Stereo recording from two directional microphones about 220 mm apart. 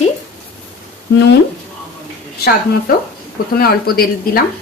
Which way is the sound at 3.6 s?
45° left (ahead or behind).